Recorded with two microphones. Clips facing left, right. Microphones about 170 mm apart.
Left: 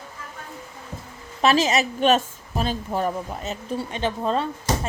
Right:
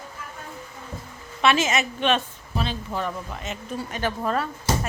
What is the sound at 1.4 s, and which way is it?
A woman's voice, 35° left (ahead or behind).